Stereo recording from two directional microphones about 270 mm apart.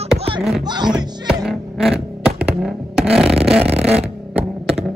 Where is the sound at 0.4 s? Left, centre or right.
Centre.